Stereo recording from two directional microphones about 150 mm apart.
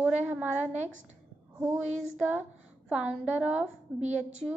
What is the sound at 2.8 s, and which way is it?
Speech, 5° right (ahead or behind).